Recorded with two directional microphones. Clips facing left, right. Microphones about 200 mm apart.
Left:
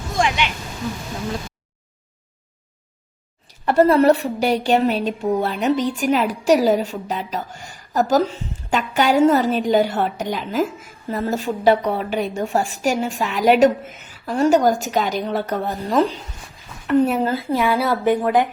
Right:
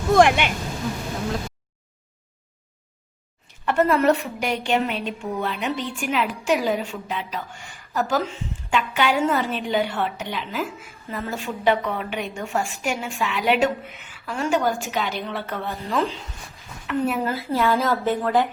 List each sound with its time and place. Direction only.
0.1 s a sound: 60° right (ahead or behind)
3.4 s a woman's voice: 35° left (ahead or behind)
17.3 s speech: 15° left (ahead or behind)